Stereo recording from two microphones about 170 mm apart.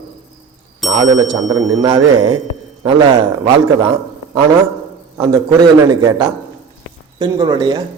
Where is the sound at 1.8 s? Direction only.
30° right (ahead or behind).